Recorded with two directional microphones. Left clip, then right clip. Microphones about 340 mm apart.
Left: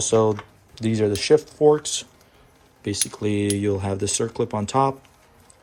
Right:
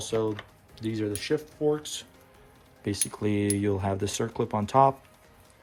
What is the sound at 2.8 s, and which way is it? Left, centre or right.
Speech, centre.